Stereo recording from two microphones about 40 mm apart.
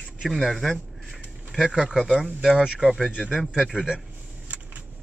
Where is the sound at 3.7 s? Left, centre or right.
Right.